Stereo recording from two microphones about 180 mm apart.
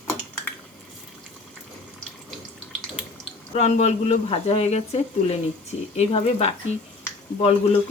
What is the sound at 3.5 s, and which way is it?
Speech, 40° left (ahead or behind).